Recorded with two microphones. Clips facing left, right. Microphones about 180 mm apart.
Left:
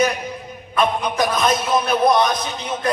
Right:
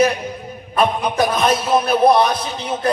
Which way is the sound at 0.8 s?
30° right (ahead or behind).